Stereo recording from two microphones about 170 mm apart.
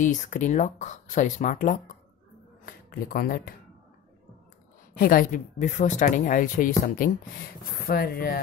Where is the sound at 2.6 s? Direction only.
60° left (ahead or behind).